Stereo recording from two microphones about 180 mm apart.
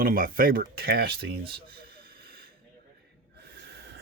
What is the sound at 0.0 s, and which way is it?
Speech, 50° right (ahead or behind).